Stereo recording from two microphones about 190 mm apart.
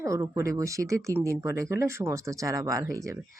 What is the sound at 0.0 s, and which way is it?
Speech, 15° right (ahead or behind).